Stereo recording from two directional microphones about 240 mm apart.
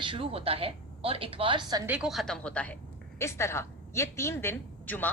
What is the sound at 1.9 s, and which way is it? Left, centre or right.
A woman's voice, centre.